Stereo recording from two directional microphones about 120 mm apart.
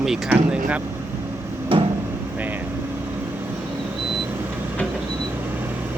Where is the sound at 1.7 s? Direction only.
50° right (ahead or behind).